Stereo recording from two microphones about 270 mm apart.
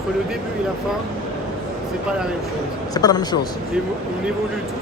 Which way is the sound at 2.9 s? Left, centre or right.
Centre.